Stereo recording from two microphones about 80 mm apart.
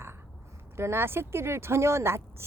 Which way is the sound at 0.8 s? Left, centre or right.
Right.